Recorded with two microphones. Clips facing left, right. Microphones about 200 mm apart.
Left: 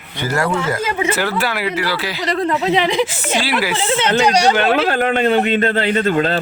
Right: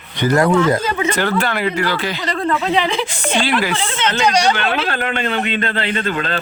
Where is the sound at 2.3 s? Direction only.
20° left (ahead or behind).